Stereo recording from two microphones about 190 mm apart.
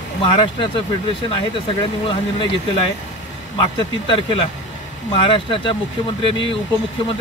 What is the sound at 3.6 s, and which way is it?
Speech, 25° left (ahead or behind).